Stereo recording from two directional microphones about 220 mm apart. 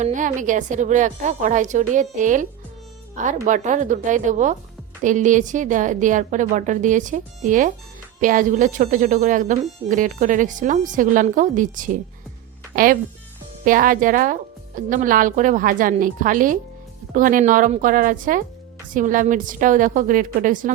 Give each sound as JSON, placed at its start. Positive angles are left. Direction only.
{"t": 0.0, "sound": "speech", "side_deg": -35}